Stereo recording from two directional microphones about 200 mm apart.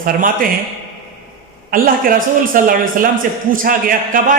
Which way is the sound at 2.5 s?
45° right (ahead or behind).